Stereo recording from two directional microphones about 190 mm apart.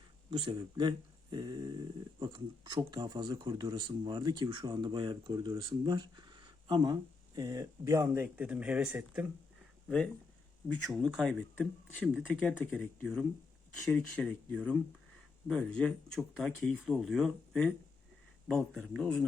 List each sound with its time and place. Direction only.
0.3 s speech: 25° right (ahead or behind); by 9.2 s 5° right (ahead or behind)
10.8 s speech: centre (ahead or behind)